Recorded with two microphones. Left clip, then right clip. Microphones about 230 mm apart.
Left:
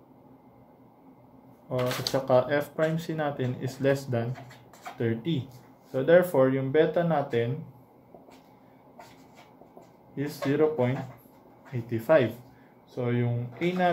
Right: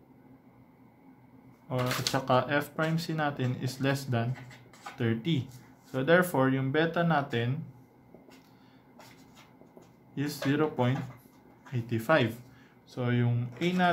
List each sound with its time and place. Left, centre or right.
2.1 s speech: right
10.1 s speech: right